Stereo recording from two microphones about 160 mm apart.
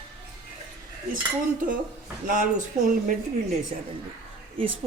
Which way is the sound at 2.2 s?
55° right (ahead or behind).